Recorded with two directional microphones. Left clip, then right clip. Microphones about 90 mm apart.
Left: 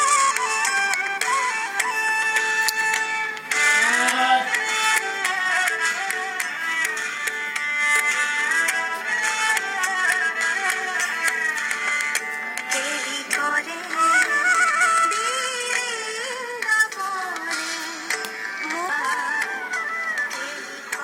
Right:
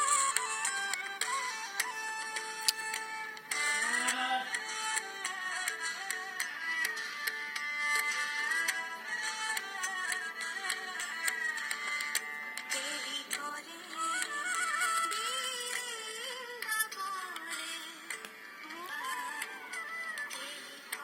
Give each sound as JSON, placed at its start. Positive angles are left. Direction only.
{"t": 0.0, "sound": "music", "side_deg": 0}
{"t": 2.7, "sound": "a sound", "side_deg": -25}
{"t": 3.5, "sound": "music", "side_deg": -20}
{"t": 4.1, "sound": "music", "side_deg": 0}
{"t": 7.9, "sound": "music", "side_deg": -25}
{"t": 9.0, "sound": "music", "side_deg": -5}
{"t": 13.3, "sound": "music", "side_deg": 0}